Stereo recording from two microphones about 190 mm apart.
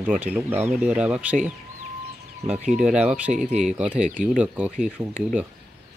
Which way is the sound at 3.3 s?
40° right (ahead or behind).